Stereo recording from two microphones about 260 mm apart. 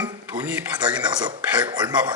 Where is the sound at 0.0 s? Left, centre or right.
Centre.